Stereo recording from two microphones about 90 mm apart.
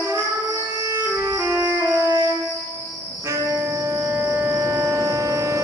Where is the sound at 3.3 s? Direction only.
30° right (ahead or behind).